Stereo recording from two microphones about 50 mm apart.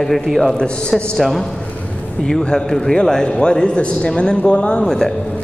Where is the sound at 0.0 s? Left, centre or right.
Centre.